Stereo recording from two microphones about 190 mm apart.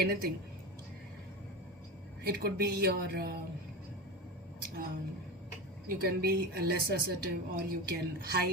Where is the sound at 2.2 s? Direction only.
55° right (ahead or behind).